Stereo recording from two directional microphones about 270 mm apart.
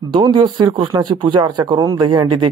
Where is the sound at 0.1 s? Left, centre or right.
Centre.